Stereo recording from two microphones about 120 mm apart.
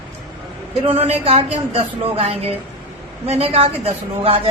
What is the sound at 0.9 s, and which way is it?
A woman's voice, 60° right (ahead or behind).